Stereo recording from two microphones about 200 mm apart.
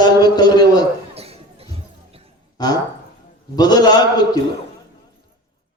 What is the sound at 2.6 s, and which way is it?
A man's voice, 20° left (ahead or behind).